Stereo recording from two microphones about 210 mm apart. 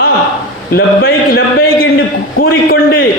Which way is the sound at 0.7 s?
45° left (ahead or behind).